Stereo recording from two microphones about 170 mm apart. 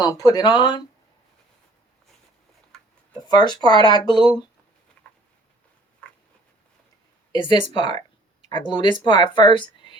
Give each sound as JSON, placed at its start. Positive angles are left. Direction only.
{"t": 0.0, "sound": "speech", "side_deg": 20}
{"t": 3.2, "sound": "speech", "side_deg": 25}
{"t": 5.0, "sound": "a sound", "side_deg": 5}
{"t": 7.3, "sound": "speech", "side_deg": 30}